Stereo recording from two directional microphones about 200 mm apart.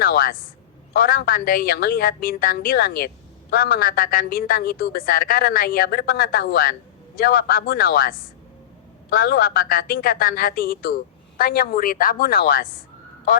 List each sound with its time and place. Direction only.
0.0 s a woman's voice: 45° left (ahead or behind)